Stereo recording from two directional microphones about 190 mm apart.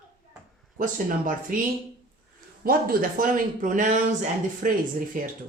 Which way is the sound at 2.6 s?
50° right (ahead or behind).